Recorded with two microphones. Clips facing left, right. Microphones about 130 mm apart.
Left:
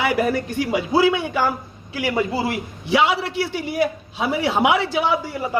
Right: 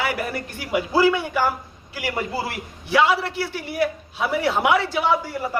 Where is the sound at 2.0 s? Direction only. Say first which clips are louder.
Left 5 dB; 20° left (ahead or behind).